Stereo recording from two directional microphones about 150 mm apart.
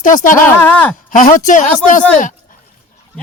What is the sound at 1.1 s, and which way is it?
Speech, 60° left (ahead or behind).